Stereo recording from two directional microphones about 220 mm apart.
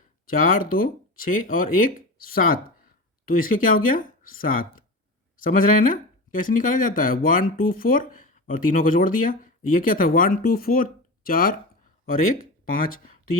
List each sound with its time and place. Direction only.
0.3 s speech: 40° left (ahead or behind)